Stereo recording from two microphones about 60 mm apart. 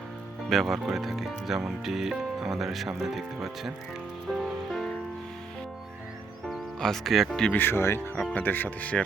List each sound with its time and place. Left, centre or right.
0.5 s speech: centre
4.3 s music: centre
6.7 s speech: centre
7.5 s speech: left
8.3 s speech: left